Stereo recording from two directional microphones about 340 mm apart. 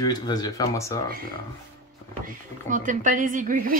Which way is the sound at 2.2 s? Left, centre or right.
Right.